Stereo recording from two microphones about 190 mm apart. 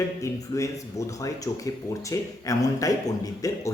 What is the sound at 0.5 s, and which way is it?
A man's voice, 15° left (ahead or behind).